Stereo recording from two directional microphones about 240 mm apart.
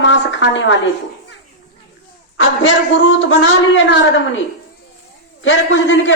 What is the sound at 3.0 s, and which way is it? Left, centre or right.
A woman's voice, left.